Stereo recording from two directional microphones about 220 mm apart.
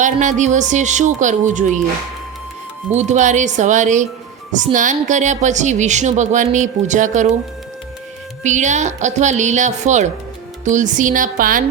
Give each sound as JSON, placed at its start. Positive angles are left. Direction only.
{"t": 0.0, "sound": "speech", "side_deg": -35}
{"t": 2.9, "sound": "speech", "side_deg": -30}
{"t": 8.4, "sound": "speech", "side_deg": -35}